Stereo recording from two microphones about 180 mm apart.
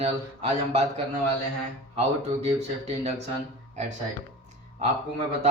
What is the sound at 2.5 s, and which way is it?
Speech, 35° right (ahead or behind).